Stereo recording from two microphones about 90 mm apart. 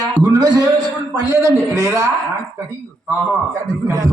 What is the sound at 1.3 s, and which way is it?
Speech, 35° right (ahead or behind).